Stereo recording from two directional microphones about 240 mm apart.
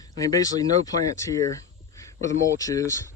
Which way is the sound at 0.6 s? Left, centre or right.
Centre.